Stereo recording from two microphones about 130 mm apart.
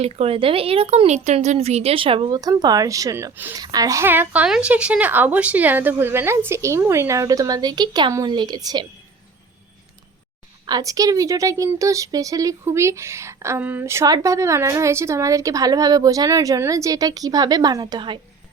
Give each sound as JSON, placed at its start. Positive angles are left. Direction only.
{"t": 0.0, "sound": "a woman's voice", "side_deg": -50}
{"t": 10.7, "sound": "speech", "side_deg": -30}